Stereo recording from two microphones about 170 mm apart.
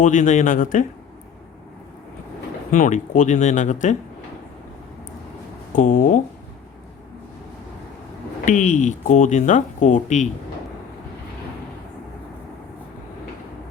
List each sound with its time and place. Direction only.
0.0 s speech: 45° left (ahead or behind)
2.7 s speech: 50° left (ahead or behind)
5.7 s speech: 50° left (ahead or behind)
8.4 s speech: 45° left (ahead or behind)